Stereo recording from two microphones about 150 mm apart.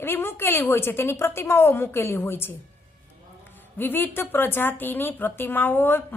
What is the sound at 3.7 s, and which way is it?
A woman's voice, 15° left (ahead or behind).